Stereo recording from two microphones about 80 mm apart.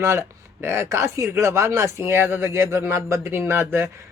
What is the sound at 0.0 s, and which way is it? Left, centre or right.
Speech, right.